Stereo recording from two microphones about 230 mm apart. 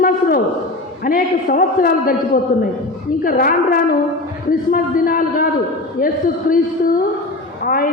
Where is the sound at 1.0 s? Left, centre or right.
Left.